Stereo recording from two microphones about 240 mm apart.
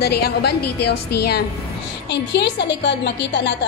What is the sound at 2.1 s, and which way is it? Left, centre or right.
A woman's voice, left.